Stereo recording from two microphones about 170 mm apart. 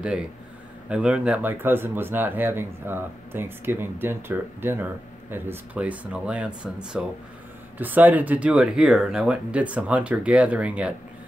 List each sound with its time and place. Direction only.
0.0 s speech: 5° right (ahead or behind)